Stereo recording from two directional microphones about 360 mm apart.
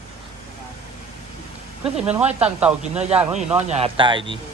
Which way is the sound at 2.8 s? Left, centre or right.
Centre.